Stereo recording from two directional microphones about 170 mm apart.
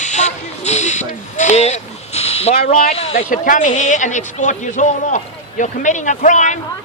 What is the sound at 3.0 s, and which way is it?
Speech, 35° left (ahead or behind).